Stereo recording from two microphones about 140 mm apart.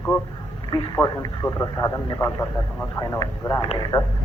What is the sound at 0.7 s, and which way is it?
Speech, 30° left (ahead or behind).